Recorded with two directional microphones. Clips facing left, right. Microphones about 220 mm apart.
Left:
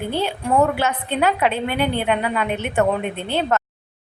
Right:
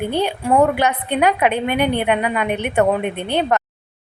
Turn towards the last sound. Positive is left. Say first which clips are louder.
# right 2 dB
turn(degrees=-15)  # may be behind; listen again after turning